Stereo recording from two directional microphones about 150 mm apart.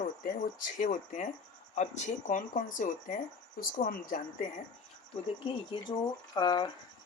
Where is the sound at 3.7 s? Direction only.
70° left (ahead or behind).